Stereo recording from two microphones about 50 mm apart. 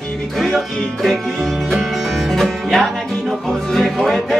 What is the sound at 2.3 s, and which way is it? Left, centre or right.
Music, centre.